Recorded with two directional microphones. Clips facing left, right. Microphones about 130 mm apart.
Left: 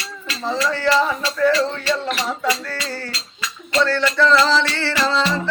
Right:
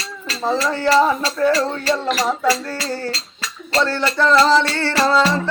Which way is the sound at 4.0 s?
40° right (ahead or behind).